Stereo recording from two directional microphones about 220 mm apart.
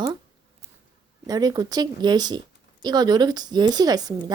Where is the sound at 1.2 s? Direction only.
15° right (ahead or behind).